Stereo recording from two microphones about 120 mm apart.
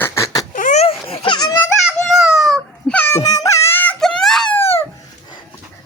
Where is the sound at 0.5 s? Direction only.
85° left.